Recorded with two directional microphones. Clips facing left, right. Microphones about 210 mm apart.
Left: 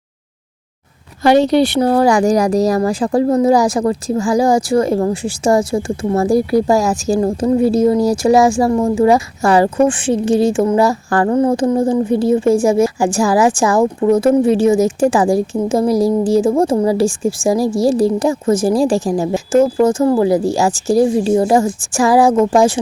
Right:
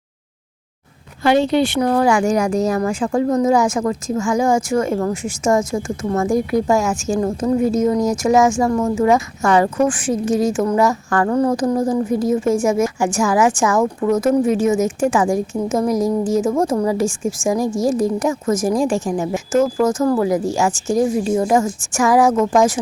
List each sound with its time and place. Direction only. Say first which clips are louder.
1.5 s a woman's voice: left 4 dB; 40° left (ahead or behind)